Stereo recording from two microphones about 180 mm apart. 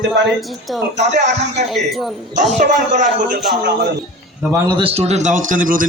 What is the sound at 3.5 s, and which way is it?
Speech, 60° right (ahead or behind).